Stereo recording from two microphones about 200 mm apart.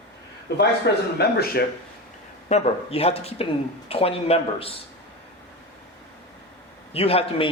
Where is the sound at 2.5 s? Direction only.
30° left (ahead or behind).